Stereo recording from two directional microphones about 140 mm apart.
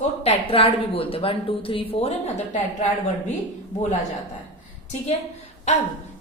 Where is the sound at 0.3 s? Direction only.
40° left (ahead or behind).